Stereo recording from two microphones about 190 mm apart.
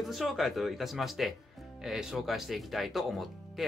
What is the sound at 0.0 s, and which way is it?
Speech, centre (ahead or behind).